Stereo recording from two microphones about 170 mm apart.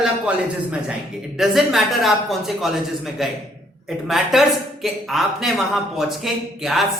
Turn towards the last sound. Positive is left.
turn(degrees=0)  # may be behind; listen again after turning